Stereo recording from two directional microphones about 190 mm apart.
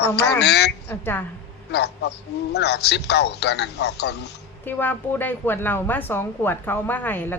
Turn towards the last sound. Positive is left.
turn(degrees=10)  # may be behind; listen again after turning